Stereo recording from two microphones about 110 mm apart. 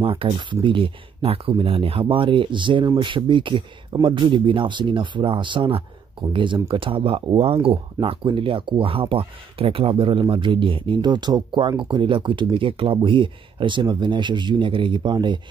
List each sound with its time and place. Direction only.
0.0 s speech: 55° right (ahead or behind)